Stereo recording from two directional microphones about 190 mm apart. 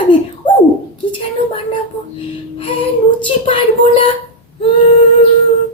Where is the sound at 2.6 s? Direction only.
30° left (ahead or behind).